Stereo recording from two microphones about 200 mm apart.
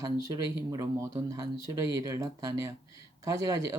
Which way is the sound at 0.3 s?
15° right (ahead or behind).